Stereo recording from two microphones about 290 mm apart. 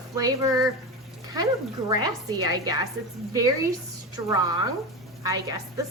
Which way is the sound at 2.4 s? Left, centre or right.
Centre.